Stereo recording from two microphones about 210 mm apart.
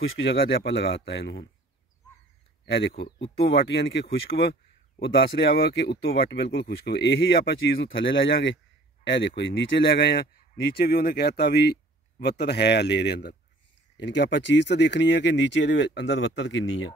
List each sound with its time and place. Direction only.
0.0 s speech: 60° left (ahead or behind)
2.6 s speech: 55° left (ahead or behind)